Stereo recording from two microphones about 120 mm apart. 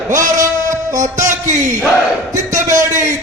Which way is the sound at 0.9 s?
90° right.